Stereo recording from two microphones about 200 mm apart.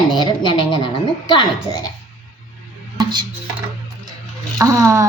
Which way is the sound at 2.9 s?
20° right (ahead or behind).